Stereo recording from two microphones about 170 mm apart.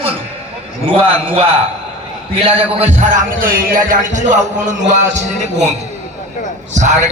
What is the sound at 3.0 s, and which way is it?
A man's voice, 50° right (ahead or behind).